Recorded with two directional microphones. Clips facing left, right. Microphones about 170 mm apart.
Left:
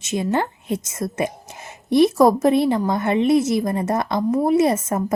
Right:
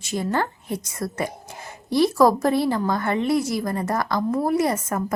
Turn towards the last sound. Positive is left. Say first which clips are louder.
# left 4 dB
turn(degrees=25)  # may be behind; listen again after turning